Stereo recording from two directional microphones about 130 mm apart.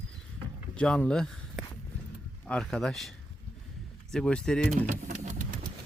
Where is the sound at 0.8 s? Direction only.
5° left (ahead or behind).